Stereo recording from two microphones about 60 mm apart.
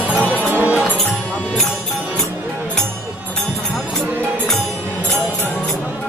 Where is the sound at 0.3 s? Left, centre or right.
Right.